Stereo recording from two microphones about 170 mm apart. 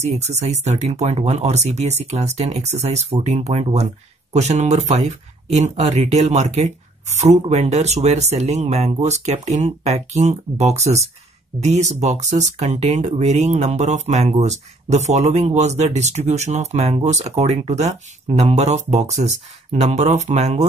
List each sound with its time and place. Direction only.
0.0 s speech: 40° right (ahead or behind)